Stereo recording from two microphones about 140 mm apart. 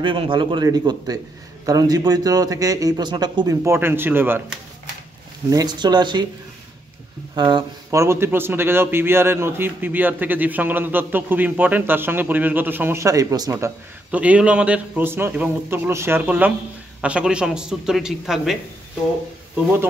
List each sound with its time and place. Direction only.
0.0 s speech: 35° right (ahead or behind); by 4.4 s 15° right (ahead or behind)
5.5 s speech: 30° right (ahead or behind)
7.3 s speech: 35° right (ahead or behind)
7.9 s a man's voice: 20° right (ahead or behind)
14.1 s a man's voice: 10° right (ahead or behind)